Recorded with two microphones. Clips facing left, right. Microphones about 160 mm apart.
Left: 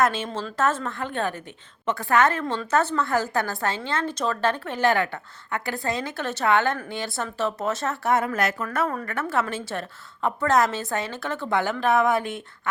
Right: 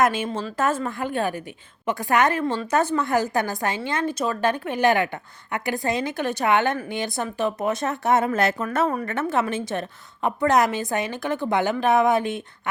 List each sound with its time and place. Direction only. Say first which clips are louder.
0.0 s a woman's voice: right 2 dB; 15° right (ahead or behind)